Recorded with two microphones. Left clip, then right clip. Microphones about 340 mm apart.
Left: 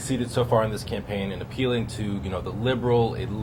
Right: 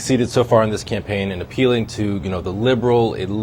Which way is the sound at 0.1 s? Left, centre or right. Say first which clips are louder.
Right 8 dB; right.